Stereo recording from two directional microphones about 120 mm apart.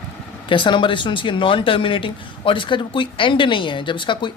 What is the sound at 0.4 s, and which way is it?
Speech, 45° left (ahead or behind).